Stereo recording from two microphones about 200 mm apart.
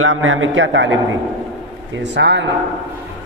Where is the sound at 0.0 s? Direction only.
90° right; by 0.9 s 70° right (ahead or behind).